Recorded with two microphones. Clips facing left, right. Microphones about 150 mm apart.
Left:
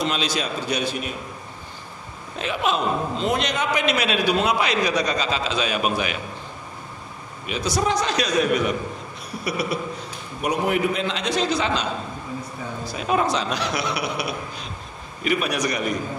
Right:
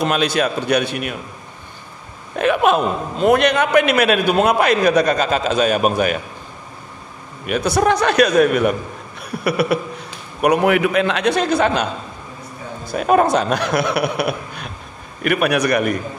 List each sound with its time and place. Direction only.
0.0 s a man's voice: 55° right (ahead or behind)
2.3 s a man's voice: 60° right (ahead or behind)
7.4 s a man's voice: 55° right (ahead or behind)
9.2 s a sound: 60° right (ahead or behind)
10.4 s a man's voice: 70° right (ahead or behind)